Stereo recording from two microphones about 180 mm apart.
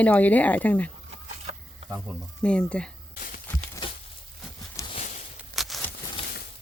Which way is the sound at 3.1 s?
50° left (ahead or behind).